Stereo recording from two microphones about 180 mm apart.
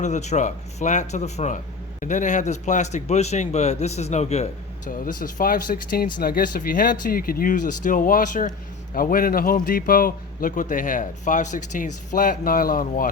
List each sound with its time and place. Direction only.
0.0 s a man's voice: 40° left (ahead or behind)